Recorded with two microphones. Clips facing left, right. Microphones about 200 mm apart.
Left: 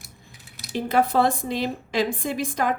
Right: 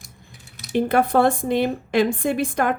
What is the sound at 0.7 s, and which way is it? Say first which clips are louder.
Speech: right 3 dB; 55° right (ahead or behind).